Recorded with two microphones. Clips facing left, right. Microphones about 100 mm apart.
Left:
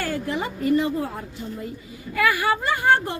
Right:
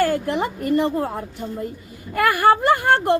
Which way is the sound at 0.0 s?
65° right (ahead or behind).